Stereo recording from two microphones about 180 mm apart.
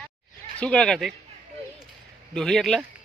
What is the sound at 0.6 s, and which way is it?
Speech, 5° left (ahead or behind).